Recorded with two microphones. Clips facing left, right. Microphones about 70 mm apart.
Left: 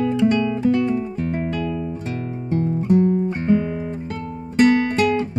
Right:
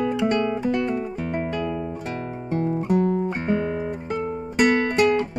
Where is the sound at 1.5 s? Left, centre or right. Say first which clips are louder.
Left 2 dB; centre.